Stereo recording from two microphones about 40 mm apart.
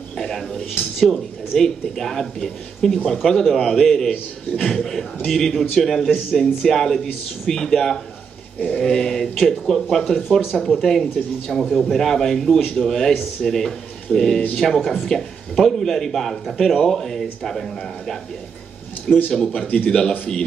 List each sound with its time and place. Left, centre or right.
0.2 s a sound: centre
0.9 s speech: centre
3.5 s speech: centre
11.6 s a man's voice: centre
11.9 s speech: centre
14.6 s a man's voice: centre
15.0 s speech: centre
19.3 s a man's voice: left
19.6 s a man's voice: left